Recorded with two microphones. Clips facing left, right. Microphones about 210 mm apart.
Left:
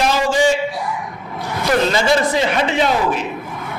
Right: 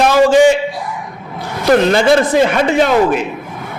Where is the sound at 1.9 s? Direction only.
55° right (ahead or behind).